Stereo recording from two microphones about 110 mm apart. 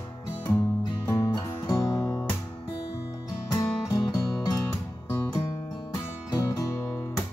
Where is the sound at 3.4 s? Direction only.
30° left (ahead or behind).